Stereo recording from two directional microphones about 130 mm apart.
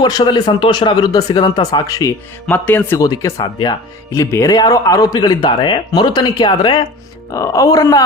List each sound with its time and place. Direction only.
0.0 s speech: 35° left (ahead or behind)
2.5 s speech: 15° left (ahead or behind)
3.0 s speech: 25° left (ahead or behind)
7.3 s speech: 25° left (ahead or behind)